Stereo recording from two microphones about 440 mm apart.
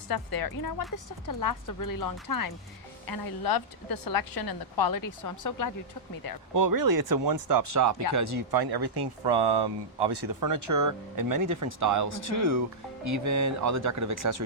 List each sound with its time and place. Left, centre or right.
0.1 s a woman's voice: left
6.5 s speech: right
8.4 s speech: right
10.4 s speech: right